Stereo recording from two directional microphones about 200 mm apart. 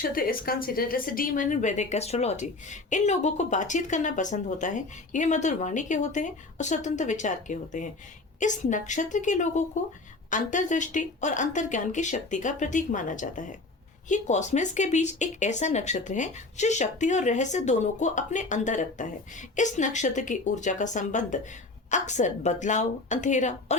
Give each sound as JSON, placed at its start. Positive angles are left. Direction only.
{"t": 0.0, "sound": "a woman's voice", "side_deg": 45}